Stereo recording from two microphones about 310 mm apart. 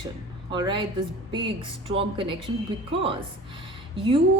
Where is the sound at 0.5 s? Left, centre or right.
Centre.